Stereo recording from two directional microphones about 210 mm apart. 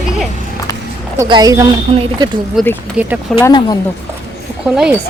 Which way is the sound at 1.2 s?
15° right (ahead or behind).